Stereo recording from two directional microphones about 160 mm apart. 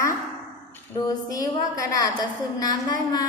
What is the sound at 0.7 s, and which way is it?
A woman's voice, 20° left (ahead or behind).